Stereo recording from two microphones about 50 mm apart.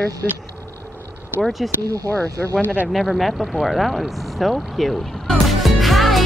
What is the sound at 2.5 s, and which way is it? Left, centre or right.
Speech, left.